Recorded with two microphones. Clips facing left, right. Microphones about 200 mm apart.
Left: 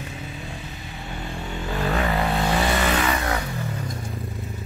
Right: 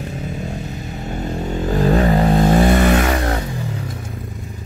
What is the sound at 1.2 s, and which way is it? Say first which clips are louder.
Vehicle: right 10 dB; 40° right (ahead or behind).